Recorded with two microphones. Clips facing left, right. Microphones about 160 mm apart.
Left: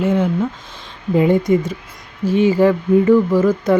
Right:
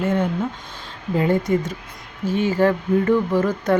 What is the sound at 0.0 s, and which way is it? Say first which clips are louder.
Speech: left 4 dB; 10° left (ahead or behind).